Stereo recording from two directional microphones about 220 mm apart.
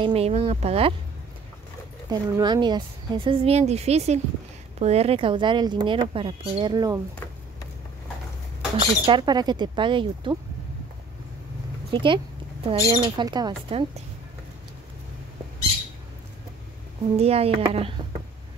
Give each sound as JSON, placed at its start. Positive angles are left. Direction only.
{"t": 0.0, "sound": "speech", "side_deg": -25}
{"t": 2.0, "sound": "speech", "side_deg": -20}
{"t": 8.7, "sound": "speech", "side_deg": -20}
{"t": 11.9, "sound": "speech", "side_deg": -20}
{"t": 17.2, "sound": "speech", "side_deg": -25}